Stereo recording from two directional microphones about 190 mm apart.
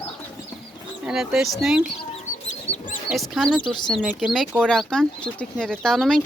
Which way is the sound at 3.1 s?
Centre (ahead or behind).